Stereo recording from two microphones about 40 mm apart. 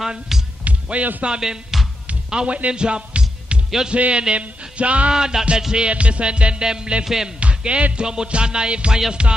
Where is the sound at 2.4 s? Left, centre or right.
Right.